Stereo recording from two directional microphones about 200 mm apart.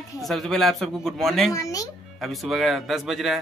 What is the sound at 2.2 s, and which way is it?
Speech, centre (ahead or behind).